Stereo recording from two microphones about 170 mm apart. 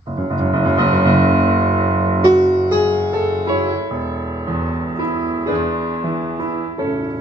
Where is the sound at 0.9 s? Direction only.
20° right (ahead or behind).